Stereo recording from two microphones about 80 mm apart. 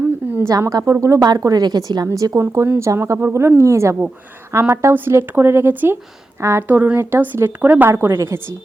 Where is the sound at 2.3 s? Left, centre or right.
Right.